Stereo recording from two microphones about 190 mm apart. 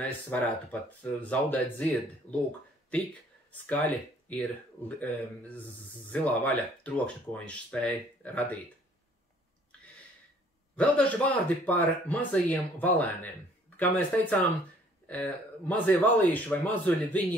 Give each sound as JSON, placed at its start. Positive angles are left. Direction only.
{"t": 0.3, "sound": "speech", "side_deg": 10}
{"t": 2.3, "sound": "speech", "side_deg": 35}
{"t": 3.6, "sound": "speech", "side_deg": 10}
{"t": 10.8, "sound": "speech", "side_deg": 5}